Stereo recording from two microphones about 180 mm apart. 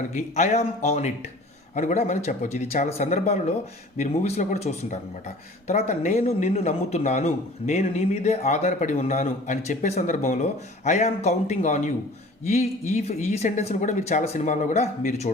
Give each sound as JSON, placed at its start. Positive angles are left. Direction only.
{"t": 0.1, "sound": "a man's voice", "side_deg": 40}